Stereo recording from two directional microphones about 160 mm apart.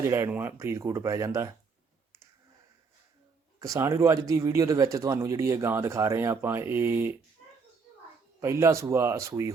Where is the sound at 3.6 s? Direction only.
20° right (ahead or behind).